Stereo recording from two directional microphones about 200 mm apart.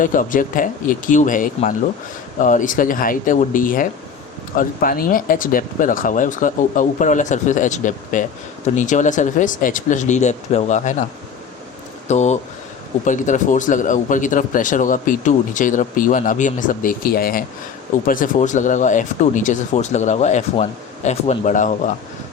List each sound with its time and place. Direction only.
0.0 s speech: 40° left (ahead or behind)
12.0 s speech: 35° left (ahead or behind)